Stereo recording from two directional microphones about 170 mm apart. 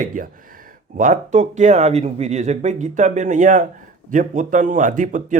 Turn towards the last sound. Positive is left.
turn(degrees=-50)  # may be behind; listen again after turning